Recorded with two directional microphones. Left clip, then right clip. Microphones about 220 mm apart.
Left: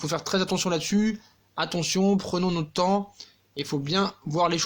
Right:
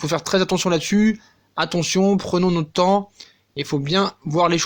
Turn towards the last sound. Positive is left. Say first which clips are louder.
# right 6 dB
turn(degrees=-30)  # may be behind; listen again after turning